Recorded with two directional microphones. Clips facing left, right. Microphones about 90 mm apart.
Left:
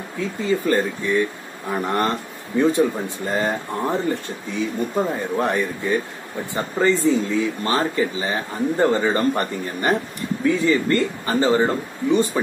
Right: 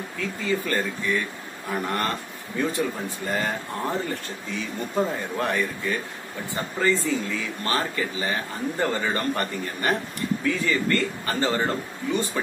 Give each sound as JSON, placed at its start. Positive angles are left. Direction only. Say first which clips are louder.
{"t": 0.5, "sound": "speech", "louder": "left 6 dB", "side_deg": 20}